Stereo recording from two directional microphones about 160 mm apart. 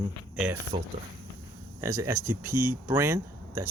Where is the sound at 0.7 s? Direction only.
30° right (ahead or behind).